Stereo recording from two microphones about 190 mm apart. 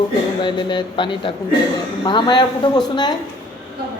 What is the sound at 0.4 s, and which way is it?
A woman's voice, 25° left (ahead or behind).